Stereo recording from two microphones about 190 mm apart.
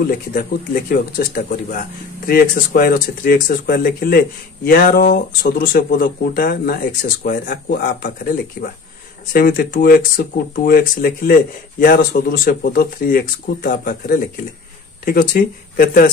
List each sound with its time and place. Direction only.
0.0 s speech: 50° left (ahead or behind)